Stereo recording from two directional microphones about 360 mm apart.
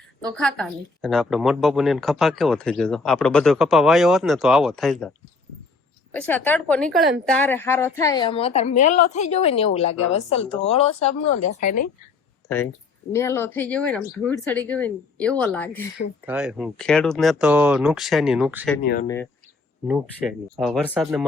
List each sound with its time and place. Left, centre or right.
0.2 s a woman's voice: centre; by 11.8 s left
13.1 s a woman's voice: centre